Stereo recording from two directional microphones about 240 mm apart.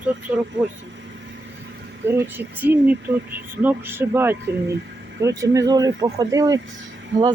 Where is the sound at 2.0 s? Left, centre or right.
Centre.